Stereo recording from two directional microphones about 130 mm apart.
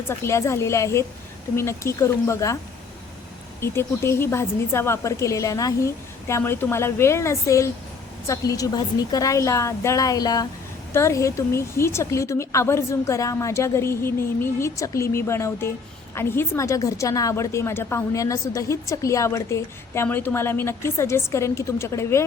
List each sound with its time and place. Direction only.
0.1 s a woman's voice: 20° left (ahead or behind)
3.6 s a woman's voice: 20° left (ahead or behind)